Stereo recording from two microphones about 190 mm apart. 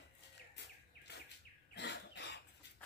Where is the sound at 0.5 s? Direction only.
65° left (ahead or behind).